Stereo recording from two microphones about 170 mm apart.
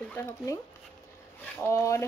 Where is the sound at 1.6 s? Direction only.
15° left (ahead or behind).